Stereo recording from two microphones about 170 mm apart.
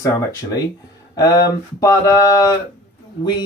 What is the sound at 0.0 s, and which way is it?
Speech, 20° left (ahead or behind).